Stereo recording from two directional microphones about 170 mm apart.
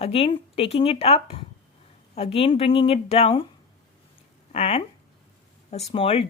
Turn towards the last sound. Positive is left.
turn(degrees=35)  # may be behind; listen again after turning